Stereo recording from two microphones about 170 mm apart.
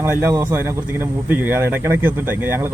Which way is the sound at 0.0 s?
15° right (ahead or behind).